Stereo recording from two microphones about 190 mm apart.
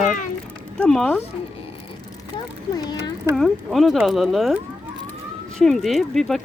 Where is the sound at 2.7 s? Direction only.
20° left (ahead or behind).